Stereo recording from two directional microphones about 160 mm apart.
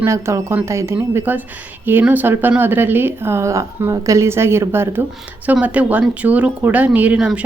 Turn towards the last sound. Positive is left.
turn(degrees=-5)  # may be behind; listen again after turning